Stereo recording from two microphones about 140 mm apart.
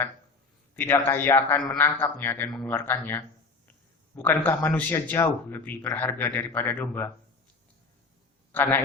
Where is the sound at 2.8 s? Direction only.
15° left (ahead or behind).